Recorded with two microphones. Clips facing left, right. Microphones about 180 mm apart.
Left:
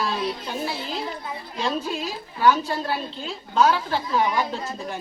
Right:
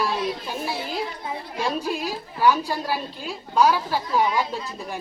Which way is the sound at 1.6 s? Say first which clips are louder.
Even; 10° right (ahead or behind).